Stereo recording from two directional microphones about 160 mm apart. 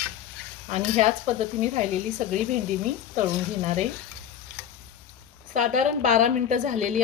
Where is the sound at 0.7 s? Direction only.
45° right (ahead or behind).